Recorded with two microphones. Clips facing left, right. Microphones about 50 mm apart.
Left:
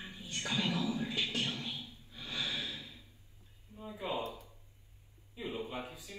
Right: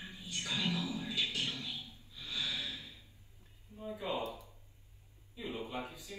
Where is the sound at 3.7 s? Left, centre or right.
Right.